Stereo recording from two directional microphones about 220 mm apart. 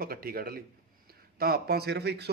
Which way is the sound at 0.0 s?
45° right (ahead or behind).